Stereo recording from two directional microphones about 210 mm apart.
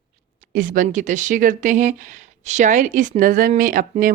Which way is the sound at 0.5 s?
40° right (ahead or behind).